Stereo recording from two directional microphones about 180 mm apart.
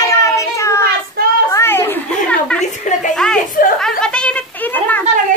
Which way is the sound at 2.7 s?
40° left (ahead or behind).